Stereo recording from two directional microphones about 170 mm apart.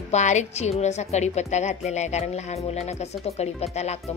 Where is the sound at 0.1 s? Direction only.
45° left (ahead or behind).